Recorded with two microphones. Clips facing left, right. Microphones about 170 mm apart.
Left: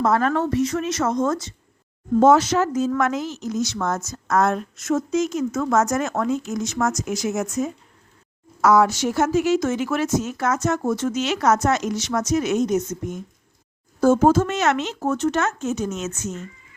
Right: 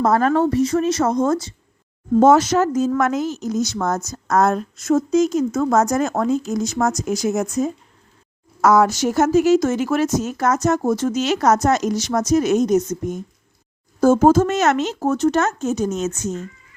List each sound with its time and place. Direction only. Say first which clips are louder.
0.0 s a woman's voice: right 4 dB; 40° right (ahead or behind)
8.6 s a woman's voice: right 2 dB; 45° right (ahead or behind)